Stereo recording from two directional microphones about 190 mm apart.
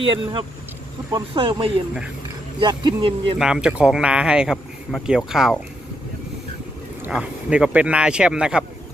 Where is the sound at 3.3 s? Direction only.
5° right (ahead or behind).